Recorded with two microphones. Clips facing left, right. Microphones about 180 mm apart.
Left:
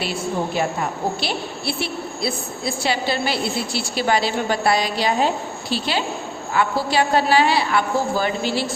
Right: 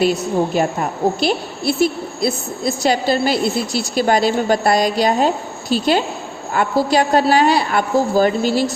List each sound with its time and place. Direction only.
0.0 s a woman's voice: 45° right (ahead or behind)